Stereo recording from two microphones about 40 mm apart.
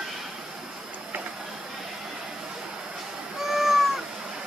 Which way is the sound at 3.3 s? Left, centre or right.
Centre.